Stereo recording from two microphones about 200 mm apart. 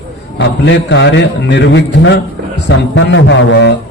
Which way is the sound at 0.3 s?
65° left (ahead or behind).